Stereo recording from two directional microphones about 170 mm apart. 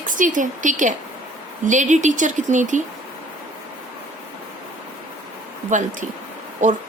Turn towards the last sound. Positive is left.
turn(degrees=-45)  # may be behind; listen again after turning